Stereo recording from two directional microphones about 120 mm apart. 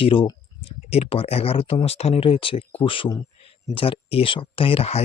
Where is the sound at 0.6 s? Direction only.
60° left (ahead or behind).